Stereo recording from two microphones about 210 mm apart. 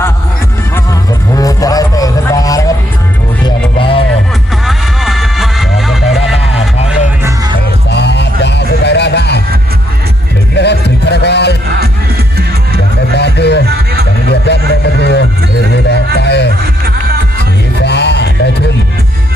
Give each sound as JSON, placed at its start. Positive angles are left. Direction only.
{"t": 1.4, "sound": "music", "side_deg": 15}
{"t": 4.6, "sound": "music", "side_deg": 0}
{"t": 7.9, "sound": "music", "side_deg": 55}
{"t": 10.5, "sound": "music", "side_deg": 55}
{"t": 13.1, "sound": "music", "side_deg": 55}
{"t": 16.8, "sound": "music", "side_deg": -50}
{"t": 17.7, "sound": "music", "side_deg": 55}